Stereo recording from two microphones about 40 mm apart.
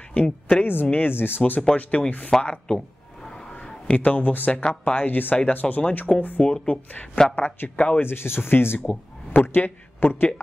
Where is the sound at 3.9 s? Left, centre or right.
Left.